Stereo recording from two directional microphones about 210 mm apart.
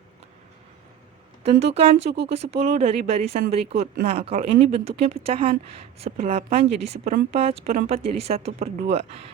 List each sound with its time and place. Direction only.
1.5 s speech: 30° right (ahead or behind)
7.6 s speech: 45° right (ahead or behind)
7.9 s speech: 30° right (ahead or behind)